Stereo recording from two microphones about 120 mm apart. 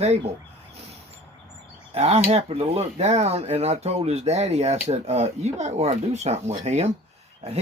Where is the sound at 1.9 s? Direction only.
60° right (ahead or behind).